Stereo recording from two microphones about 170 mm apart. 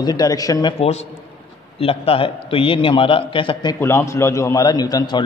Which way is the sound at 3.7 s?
15° left (ahead or behind).